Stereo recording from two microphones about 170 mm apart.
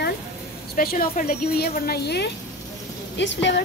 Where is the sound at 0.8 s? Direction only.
60° left (ahead or behind).